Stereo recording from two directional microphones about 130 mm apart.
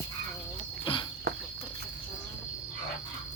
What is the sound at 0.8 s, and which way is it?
Cricket, 40° left (ahead or behind).